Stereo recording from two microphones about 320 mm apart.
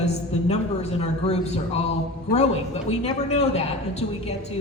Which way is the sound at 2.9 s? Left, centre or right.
Centre.